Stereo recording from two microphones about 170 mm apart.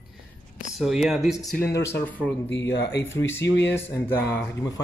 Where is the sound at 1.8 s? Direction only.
15° left (ahead or behind).